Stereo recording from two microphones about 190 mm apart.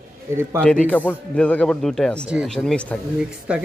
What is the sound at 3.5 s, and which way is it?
Speech, 5° right (ahead or behind).